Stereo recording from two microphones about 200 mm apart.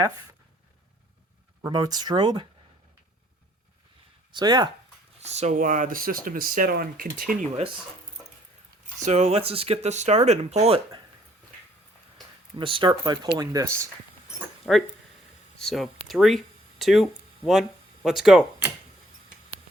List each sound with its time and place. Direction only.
1.6 s speech: 20° right (ahead or behind)
4.3 s speech: 20° right (ahead or behind)
5.2 s speech: 35° right (ahead or behind)
9.0 s speech: 35° right (ahead or behind)
12.5 s speech: 25° right (ahead or behind)
14.3 s a sound: centre (ahead or behind)
15.5 s speech: centre (ahead or behind)